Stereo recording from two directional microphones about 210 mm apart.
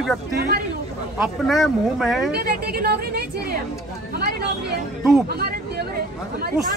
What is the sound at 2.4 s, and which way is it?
Speech, 45° right (ahead or behind).